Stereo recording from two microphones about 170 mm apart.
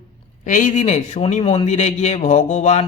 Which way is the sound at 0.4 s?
50° left (ahead or behind).